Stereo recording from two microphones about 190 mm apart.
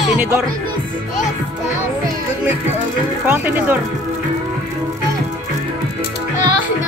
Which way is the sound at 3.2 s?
10° right (ahead or behind).